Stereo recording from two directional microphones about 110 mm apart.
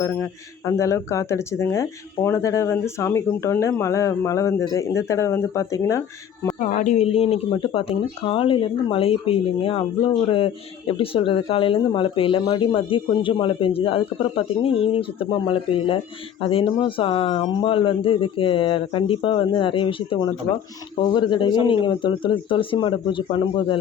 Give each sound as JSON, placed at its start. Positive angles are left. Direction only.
{"t": 0.0, "sound": "speech", "side_deg": 25}
{"t": 6.6, "sound": "speech", "side_deg": 90}
{"t": 20.1, "sound": "speech", "side_deg": 45}